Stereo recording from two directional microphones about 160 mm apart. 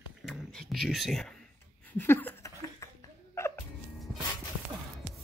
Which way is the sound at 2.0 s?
10° left (ahead or behind).